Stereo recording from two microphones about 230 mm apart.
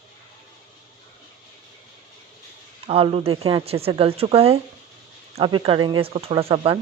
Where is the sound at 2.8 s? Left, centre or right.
Right.